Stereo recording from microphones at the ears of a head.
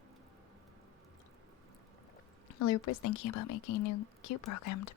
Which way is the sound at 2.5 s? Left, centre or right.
Left.